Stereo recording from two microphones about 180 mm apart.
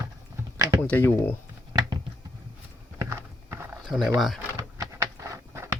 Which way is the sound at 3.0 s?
15° right (ahead or behind).